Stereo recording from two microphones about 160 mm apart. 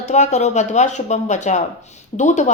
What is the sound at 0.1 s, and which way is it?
Speech, 45° left (ahead or behind).